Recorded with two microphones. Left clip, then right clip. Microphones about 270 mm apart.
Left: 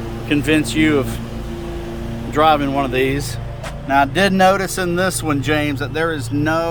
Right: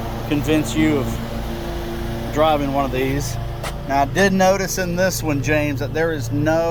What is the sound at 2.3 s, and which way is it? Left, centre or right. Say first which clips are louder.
Speech: left 3 dB; centre.